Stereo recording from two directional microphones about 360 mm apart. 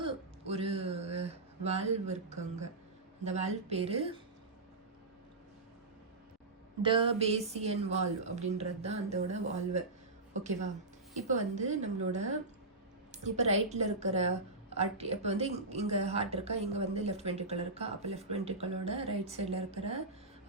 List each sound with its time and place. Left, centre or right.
0.0 s a sound: centre
3.2 s a woman's voice: centre
6.8 s a woman's voice: centre
13.1 s a woman's voice: centre